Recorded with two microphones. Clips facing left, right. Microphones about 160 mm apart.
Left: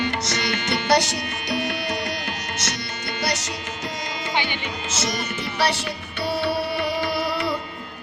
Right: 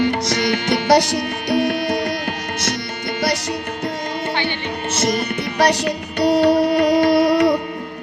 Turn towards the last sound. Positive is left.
turn(degrees=-70)  # may be behind; listen again after turning